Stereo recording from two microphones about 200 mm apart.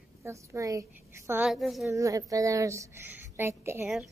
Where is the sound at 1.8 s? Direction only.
15° right (ahead or behind).